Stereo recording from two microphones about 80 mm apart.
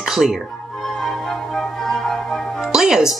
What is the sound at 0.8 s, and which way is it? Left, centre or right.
Music, centre.